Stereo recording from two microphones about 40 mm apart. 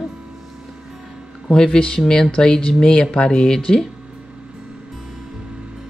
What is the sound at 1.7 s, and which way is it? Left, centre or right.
Speech, left.